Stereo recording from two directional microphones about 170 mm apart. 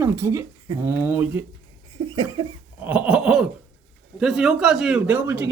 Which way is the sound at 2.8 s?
10° right (ahead or behind).